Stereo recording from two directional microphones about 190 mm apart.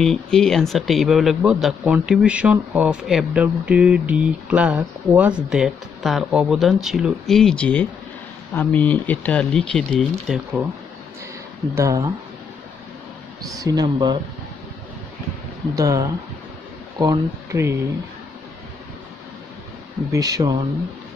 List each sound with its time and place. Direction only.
0.0 s a man's voice: centre (ahead or behind)
11.7 s speech: 15° right (ahead or behind)
13.6 s speech: 20° right (ahead or behind)
15.7 s speech: 15° right (ahead or behind)
20.1 s speech: 20° right (ahead or behind)